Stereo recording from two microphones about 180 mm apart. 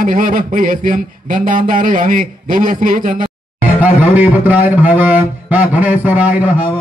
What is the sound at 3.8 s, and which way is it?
A man's voice, 10° right (ahead or behind).